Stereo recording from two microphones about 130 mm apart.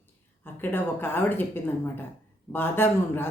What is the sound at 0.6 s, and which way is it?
A woman's voice, 15° left (ahead or behind).